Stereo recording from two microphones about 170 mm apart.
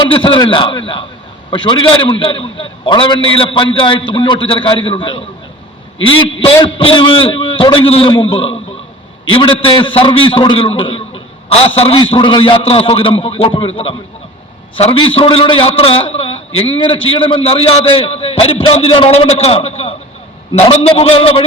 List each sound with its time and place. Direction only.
0.1 s a man's voice: 30° left (ahead or behind)
6.4 s a man's voice: 30° left (ahead or behind)